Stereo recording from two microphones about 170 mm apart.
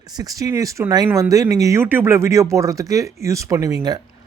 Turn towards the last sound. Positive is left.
turn(degrees=-25)  # may be behind; listen again after turning